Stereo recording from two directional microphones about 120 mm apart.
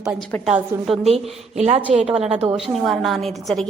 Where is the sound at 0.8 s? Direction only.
Centre (ahead or behind).